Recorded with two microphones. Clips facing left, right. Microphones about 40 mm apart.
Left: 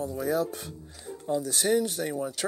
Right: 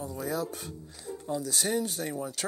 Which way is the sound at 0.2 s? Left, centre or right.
Left.